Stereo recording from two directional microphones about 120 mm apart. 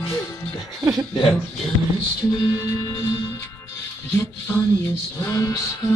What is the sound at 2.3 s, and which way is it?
Music, 35° left (ahead or behind).